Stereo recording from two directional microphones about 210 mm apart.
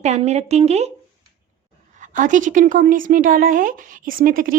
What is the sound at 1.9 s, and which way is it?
A woman's voice, 35° right (ahead or behind).